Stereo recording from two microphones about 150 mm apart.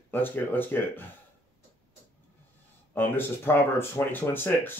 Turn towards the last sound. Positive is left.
turn(degrees=15)  # may be behind; listen again after turning